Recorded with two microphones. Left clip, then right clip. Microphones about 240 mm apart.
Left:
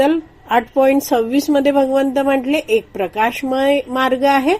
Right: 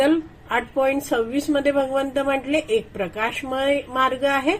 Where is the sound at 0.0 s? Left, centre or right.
Left.